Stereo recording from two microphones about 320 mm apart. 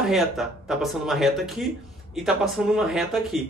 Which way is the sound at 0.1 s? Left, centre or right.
Centre.